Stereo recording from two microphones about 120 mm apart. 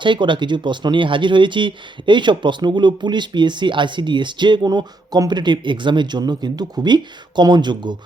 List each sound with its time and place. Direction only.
0.0 s speech: 40° right (ahead or behind)